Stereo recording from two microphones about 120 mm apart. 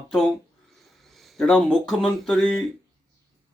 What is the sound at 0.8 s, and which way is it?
Speech, centre (ahead or behind).